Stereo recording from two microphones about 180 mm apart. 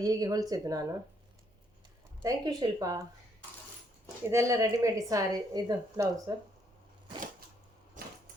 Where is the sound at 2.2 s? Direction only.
20° right (ahead or behind).